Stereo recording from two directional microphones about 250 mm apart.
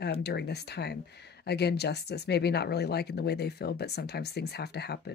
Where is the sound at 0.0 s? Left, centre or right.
Left.